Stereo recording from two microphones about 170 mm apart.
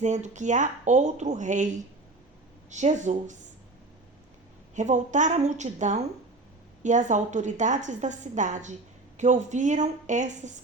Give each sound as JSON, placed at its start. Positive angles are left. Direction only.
{"t": 0.0, "sound": "a woman's voice", "side_deg": -45}
{"t": 4.7, "sound": "a woman's voice", "side_deg": -45}